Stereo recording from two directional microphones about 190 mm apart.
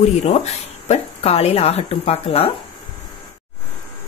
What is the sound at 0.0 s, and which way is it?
A woman's voice, 35° left (ahead or behind).